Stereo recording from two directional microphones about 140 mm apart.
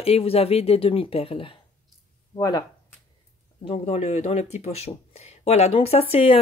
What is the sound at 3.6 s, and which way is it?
Speech, 50° left (ahead or behind).